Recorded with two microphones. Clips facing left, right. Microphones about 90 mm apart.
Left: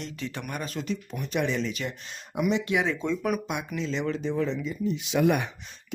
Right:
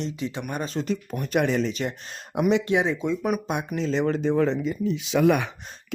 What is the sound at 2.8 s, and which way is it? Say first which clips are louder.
Speech: right 2 dB; 10° right (ahead or behind).